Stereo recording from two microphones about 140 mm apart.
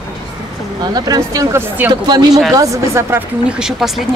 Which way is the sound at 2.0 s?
30° right (ahead or behind).